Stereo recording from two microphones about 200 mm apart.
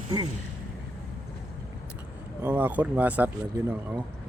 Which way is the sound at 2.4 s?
10° right (ahead or behind).